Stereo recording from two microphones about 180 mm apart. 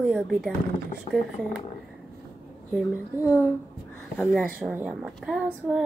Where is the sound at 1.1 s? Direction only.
35° left (ahead or behind).